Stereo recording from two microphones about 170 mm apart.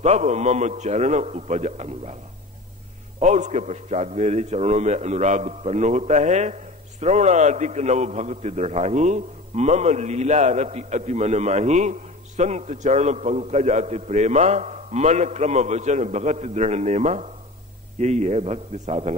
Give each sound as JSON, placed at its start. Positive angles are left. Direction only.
{"t": 0.0, "sound": "a man's voice", "side_deg": -40}
{"t": 3.2, "sound": "a man's voice", "side_deg": -45}